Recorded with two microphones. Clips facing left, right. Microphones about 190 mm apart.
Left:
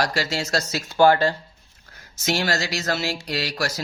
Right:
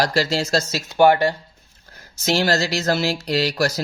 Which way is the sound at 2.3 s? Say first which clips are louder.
Right 4 dB; 35° right (ahead or behind).